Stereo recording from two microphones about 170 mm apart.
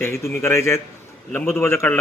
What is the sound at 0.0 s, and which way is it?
A man's voice, 15° left (ahead or behind).